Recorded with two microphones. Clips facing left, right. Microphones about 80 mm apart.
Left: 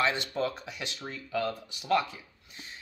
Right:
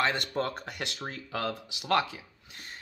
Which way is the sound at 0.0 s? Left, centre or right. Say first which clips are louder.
Even; right.